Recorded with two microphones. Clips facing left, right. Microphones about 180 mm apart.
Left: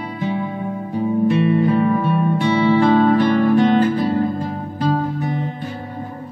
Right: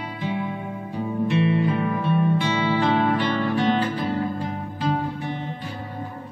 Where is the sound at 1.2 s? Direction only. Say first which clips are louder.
Left 4 dB; 45° left (ahead or behind).